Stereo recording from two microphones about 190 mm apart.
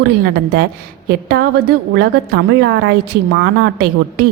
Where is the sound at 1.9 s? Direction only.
65° right (ahead or behind).